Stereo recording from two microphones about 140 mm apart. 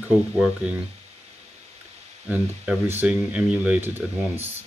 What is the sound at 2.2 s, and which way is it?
Speech, 10° right (ahead or behind).